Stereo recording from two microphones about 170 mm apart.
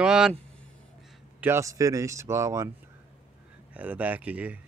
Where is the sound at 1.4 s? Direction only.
15° right (ahead or behind).